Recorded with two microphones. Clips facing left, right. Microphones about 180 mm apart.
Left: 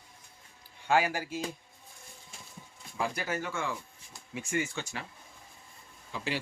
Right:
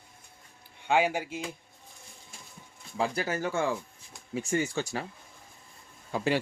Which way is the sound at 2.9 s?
35° right (ahead or behind).